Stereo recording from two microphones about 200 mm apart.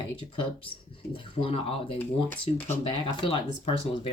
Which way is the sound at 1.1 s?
25° left (ahead or behind).